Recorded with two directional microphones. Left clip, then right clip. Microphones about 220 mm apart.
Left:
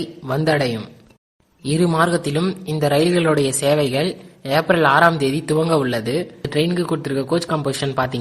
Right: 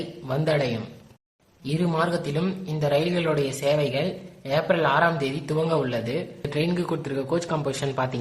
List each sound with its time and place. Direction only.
0.3 s speech: 25° left (ahead or behind)
1.8 s speech: 25° left (ahead or behind)